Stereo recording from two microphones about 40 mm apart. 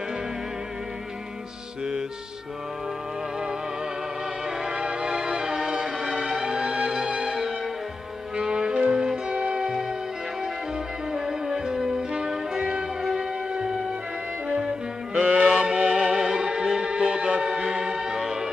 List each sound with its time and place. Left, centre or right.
4.6 s music: right
9.3 s music: right
9.6 s music: centre
11.1 s music: centre
15.1 s music: right
15.4 s music: right